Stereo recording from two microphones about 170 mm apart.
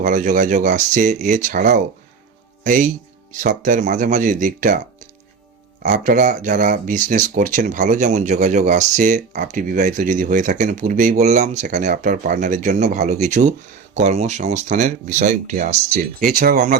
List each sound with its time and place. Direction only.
0.0 s speech: 50° right (ahead or behind)
5.8 s speech: 50° right (ahead or behind)
16.2 s speech: 60° right (ahead or behind)